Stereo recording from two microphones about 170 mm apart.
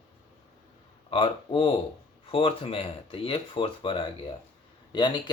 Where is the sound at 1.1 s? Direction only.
30° left (ahead or behind).